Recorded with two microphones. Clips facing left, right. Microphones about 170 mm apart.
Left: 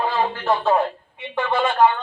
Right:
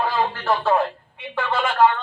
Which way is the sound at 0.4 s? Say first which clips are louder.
Left 1 dB; 15° left (ahead or behind).